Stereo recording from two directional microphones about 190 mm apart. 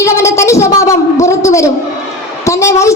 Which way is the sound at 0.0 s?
15° left (ahead or behind).